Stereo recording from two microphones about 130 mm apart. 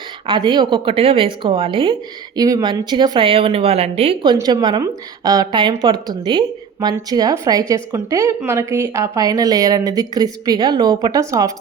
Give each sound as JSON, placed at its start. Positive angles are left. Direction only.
{"t": 0.3, "sound": "a woman's voice", "side_deg": -35}
{"t": 4.4, "sound": "a woman's voice", "side_deg": -30}